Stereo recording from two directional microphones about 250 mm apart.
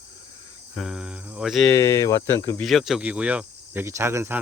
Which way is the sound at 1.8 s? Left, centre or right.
Centre.